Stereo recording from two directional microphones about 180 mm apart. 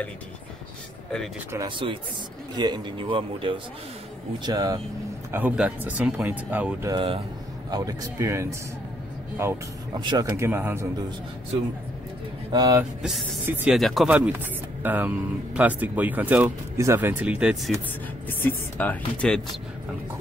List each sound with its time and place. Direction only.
2.5 s a man's voice: 25° right (ahead or behind)
5.3 s speech: 10° right (ahead or behind)
6.9 s a man's voice: 30° right (ahead or behind); by 10.9 s 10° right (ahead or behind)
12.5 s a man's voice: 20° right (ahead or behind)
13.0 s speech: centre (ahead or behind)
13.5 s speech: 10° right (ahead or behind)
13.7 s speech: centre (ahead or behind)
18.4 s speech: 10° left (ahead or behind)